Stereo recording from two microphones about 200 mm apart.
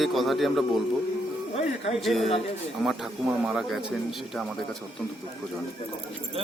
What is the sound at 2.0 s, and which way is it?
Speech, centre (ahead or behind).